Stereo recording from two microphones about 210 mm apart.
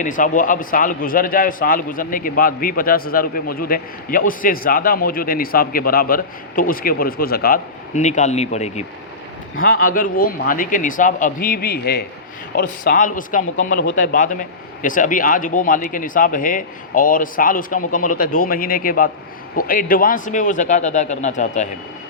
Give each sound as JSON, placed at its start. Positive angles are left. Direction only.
{"t": 0.0, "sound": "a man's voice", "side_deg": 40}
{"t": 9.6, "sound": "a man's voice", "side_deg": 45}